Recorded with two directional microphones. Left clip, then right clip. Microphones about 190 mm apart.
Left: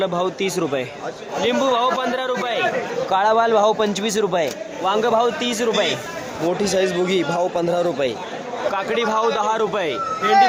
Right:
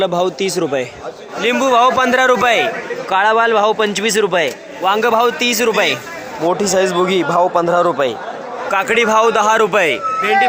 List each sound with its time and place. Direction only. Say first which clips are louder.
0.0 s a man's voice: right 5 dB; 20° right (ahead or behind); by 2.6 s 35° right (ahead or behind)
3.1 s a man's voice: right 4 dB; 5° right (ahead or behind)
8.7 s a man's voice: right 9 dB; 25° right (ahead or behind)